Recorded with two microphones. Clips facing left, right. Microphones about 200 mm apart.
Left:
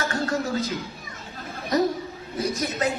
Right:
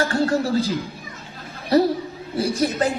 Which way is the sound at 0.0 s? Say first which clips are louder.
Right 6 dB; 30° right (ahead or behind).